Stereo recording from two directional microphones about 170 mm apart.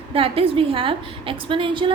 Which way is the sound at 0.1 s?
35° right (ahead or behind).